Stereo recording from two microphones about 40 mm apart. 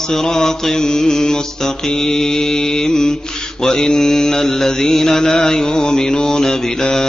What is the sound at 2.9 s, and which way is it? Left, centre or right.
Mantra, centre.